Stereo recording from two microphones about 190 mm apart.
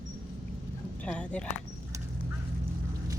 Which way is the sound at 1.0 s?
5° left (ahead or behind).